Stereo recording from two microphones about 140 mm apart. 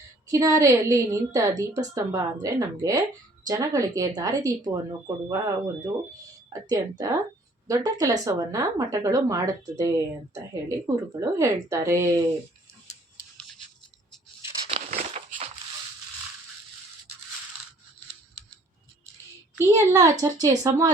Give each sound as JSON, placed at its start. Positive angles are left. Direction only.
{"t": 0.3, "sound": "a woman's voice", "side_deg": -25}
{"t": 14.9, "sound": "crumpling", "side_deg": -50}
{"t": 19.5, "sound": "a woman's voice", "side_deg": -25}